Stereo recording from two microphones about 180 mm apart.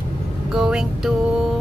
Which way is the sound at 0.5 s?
5° right (ahead or behind).